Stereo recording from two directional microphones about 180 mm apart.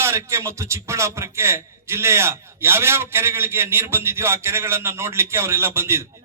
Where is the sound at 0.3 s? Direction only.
15° right (ahead or behind).